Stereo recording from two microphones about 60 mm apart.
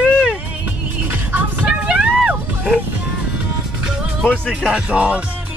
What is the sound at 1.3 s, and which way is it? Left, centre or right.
Music, right.